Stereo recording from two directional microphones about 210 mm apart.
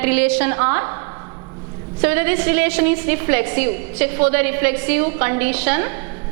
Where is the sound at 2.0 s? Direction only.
10° right (ahead or behind).